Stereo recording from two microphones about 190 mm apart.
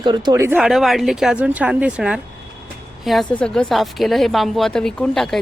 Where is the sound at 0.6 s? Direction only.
Centre (ahead or behind).